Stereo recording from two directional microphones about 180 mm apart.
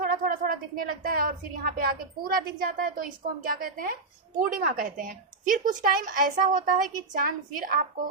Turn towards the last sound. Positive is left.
turn(degrees=-50)  # may be behind; listen again after turning